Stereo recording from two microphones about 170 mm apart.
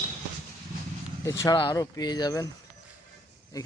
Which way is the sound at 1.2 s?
20° left (ahead or behind).